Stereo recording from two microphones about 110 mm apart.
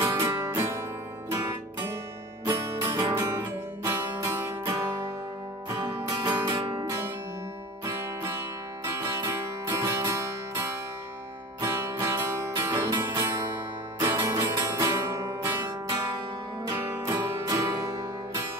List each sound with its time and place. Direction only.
0.0 s music: 35° right (ahead or behind)
5.7 s music: 40° right (ahead or behind)
6.2 s music: 20° right (ahead or behind)
6.5 s music: 50° right (ahead or behind)
7.8 s music: 25° right (ahead or behind)